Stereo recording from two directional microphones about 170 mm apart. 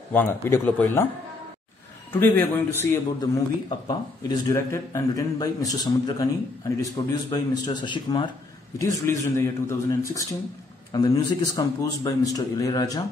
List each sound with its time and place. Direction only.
0.1 s a man's voice: 10° left (ahead or behind)
2.1 s a man's voice: 10° left (ahead or behind)
3.2 s speech: 25° left (ahead or behind)
7.2 s speech: 25° left (ahead or behind)